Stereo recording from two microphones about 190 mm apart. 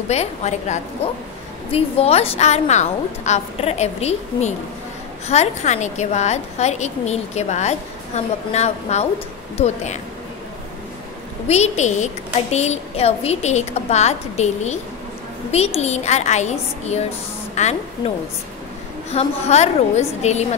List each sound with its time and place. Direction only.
0.1 s a woman's voice: 35° left (ahead or behind)
11.4 s a woman's voice: 35° left (ahead or behind)